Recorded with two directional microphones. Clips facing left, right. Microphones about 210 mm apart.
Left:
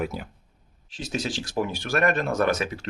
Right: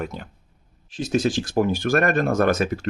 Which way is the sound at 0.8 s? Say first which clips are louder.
Right 8 dB; 50° right (ahead or behind).